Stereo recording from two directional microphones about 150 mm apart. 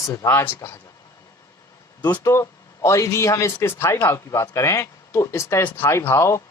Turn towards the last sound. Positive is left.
turn(degrees=20)  # may be behind; listen again after turning